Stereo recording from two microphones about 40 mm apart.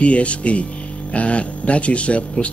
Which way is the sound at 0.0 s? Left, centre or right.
Left.